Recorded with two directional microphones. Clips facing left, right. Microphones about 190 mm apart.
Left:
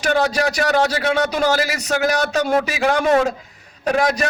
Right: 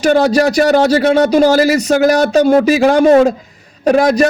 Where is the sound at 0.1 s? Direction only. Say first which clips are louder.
Right 7 dB; 35° right (ahead or behind).